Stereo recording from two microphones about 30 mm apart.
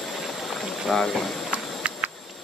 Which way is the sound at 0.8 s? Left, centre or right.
Centre.